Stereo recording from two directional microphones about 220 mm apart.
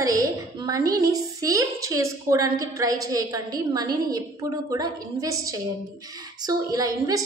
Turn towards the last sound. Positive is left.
turn(degrees=-15)  # may be behind; listen again after turning